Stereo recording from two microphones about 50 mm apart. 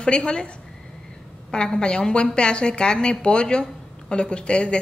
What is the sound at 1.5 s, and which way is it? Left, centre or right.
A woman's voice, centre.